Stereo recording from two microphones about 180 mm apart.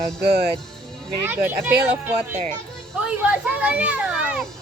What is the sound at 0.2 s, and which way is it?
Speech, 60° right (ahead or behind).